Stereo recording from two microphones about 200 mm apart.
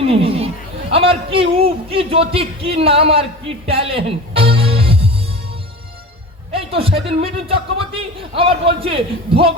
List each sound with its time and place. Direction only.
0.0 s a man's voice: 30° right (ahead or behind)
6.6 s speech: 30° right (ahead or behind)